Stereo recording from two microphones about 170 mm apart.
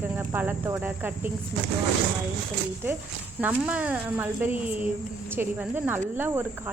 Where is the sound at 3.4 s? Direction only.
10° right (ahead or behind).